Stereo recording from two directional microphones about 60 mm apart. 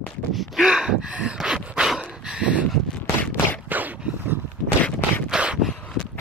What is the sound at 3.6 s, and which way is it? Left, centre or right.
Dog, right.